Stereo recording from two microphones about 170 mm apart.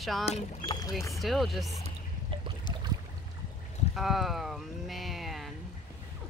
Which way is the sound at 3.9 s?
Centre (ahead or behind).